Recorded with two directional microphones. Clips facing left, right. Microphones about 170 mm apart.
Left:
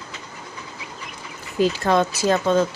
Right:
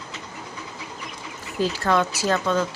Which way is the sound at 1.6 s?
15° left (ahead or behind).